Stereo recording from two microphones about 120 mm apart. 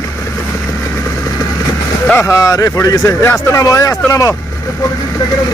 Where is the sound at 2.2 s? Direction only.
25° left (ahead or behind).